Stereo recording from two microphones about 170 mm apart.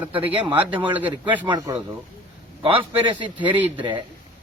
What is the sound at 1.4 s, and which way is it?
A man's voice, 25° right (ahead or behind).